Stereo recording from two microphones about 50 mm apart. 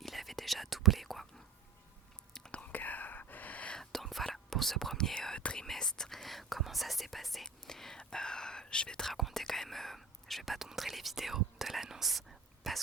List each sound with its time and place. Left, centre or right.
0.0 s whispering: centre
2.6 s whispering: left
3.8 s whispering: centre
9.1 s whispering: centre